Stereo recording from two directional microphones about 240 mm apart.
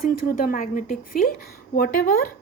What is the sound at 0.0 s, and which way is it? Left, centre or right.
A woman's voice, left.